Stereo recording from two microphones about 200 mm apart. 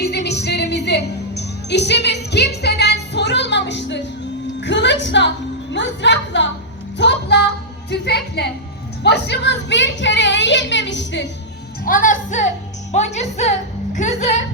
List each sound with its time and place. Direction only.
0.0 s music: 55° left (ahead or behind)
4.6 s a woman's voice: 60° left (ahead or behind)
11.9 s speech: 40° left (ahead or behind)